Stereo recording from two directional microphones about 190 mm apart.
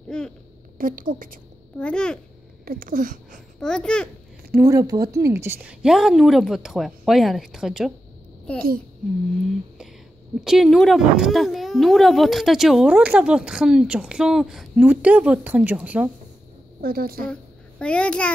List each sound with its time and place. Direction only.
0.1 s a sound: 5° left (ahead or behind)
0.7 s a woman's voice: 45° right (ahead or behind)
1.8 s speech: 5° left (ahead or behind)
2.6 s speech: 50° right (ahead or behind)
3.5 s speech: 5° left (ahead or behind)
4.6 s speech: 15° right (ahead or behind)
10.4 s speech: centre (ahead or behind)
16.8 s a woman's voice: 50° right (ahead or behind)
17.3 s a child's voice: 5° left (ahead or behind)